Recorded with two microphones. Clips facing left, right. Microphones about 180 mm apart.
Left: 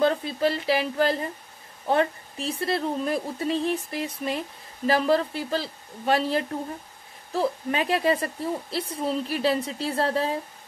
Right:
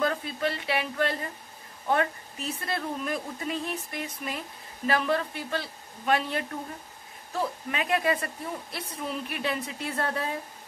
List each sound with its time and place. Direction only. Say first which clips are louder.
0.0 s a woman's voice: left 5 dB; 30° left (ahead or behind)